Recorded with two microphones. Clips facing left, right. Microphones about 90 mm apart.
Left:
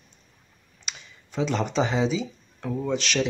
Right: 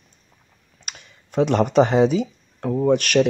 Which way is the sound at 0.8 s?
55° right (ahead or behind).